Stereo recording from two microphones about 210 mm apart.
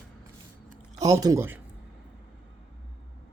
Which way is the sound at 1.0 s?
15° right (ahead or behind).